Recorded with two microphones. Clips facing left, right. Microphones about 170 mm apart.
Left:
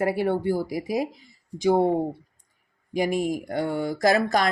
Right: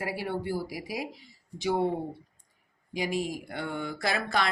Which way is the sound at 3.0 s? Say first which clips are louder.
Left 7 dB; 50° left (ahead or behind).